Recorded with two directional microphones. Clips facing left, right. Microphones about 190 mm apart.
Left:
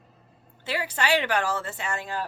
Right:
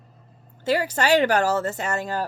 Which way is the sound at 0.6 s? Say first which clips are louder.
Right 7 dB; 40° right (ahead or behind).